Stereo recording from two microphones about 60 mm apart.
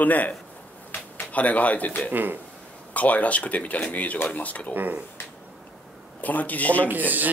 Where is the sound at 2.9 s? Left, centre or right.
Left.